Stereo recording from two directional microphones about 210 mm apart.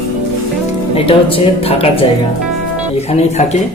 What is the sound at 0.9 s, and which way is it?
A man's voice, 25° left (ahead or behind).